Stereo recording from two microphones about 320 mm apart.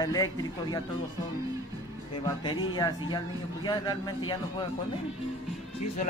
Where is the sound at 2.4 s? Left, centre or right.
Centre.